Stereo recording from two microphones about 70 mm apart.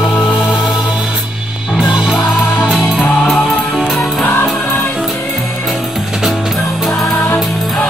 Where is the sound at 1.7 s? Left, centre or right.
Centre.